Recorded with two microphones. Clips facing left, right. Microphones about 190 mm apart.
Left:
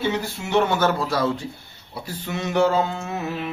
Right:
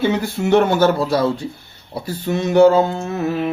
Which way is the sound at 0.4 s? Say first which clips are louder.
Right 12 dB; 55° right (ahead or behind).